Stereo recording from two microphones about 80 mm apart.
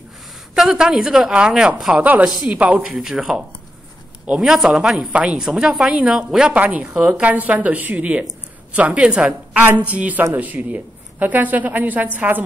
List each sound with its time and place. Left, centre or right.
0.6 s a woman's voice: centre